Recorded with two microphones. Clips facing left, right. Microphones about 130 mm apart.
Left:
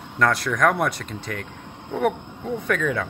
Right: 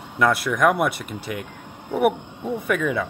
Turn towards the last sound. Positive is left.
turn(degrees=-5)  # may be behind; listen again after turning